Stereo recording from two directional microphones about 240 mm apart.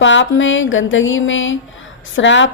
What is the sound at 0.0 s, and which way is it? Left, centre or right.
Speech, left.